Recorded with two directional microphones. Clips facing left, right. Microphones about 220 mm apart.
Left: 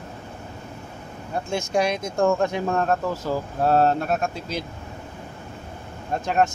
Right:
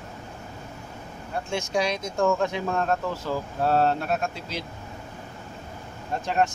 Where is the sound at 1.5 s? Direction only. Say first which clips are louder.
Left 3 dB; 50° left (ahead or behind).